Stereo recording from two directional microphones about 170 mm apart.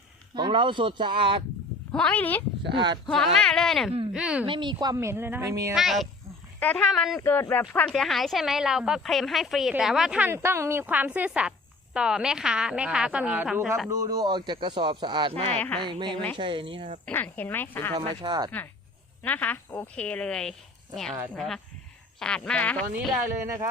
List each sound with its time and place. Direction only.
0.3 s speech: 30° right (ahead or behind)
1.9 s a woman's voice: 5° left (ahead or behind)
2.7 s speech: 25° right (ahead or behind)
3.3 s a woman's voice: 5° left (ahead or behind)
4.4 s speech: 30° right (ahead or behind)
5.7 s a woman's voice: centre (ahead or behind)
7.2 s a woman's voice: 15° left (ahead or behind); by 13.9 s 5° right (ahead or behind)
13.9 s speech: 20° right (ahead or behind)
17.1 s a woman's voice: 10° left (ahead or behind)
17.9 s speech: 30° right (ahead or behind)
19.2 s a woman's voice: 10° left (ahead or behind)